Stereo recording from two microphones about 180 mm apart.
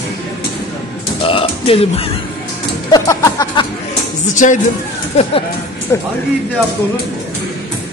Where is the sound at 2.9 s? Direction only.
20° left (ahead or behind).